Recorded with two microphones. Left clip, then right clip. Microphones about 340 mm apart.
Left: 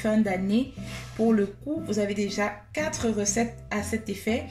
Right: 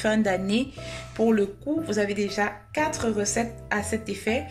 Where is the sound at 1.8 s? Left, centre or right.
Right.